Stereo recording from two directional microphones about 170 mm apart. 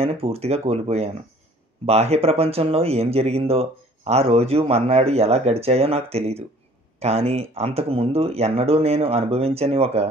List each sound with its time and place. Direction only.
0.0 s speech: 35° right (ahead or behind)